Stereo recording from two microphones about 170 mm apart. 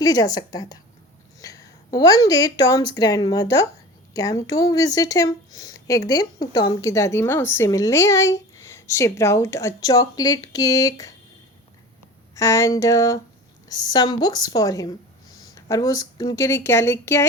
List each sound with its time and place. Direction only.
0.0 s a woman's voice: 20° left (ahead or behind)
12.3 s speech: 20° left (ahead or behind)